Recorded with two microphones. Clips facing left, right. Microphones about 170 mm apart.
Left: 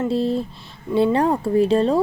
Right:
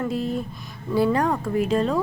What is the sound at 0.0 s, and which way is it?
Speech, 30° left (ahead or behind).